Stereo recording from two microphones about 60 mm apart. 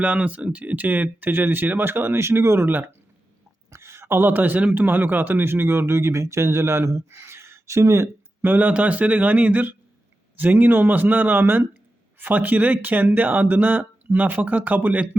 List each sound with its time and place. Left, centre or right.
0.0 s speech: right
3.7 s a man's voice: right
8.4 s speech: right
12.2 s speech: right